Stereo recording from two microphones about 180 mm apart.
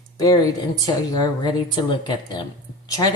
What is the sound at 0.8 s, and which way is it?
A woman's voice, 20° left (ahead or behind).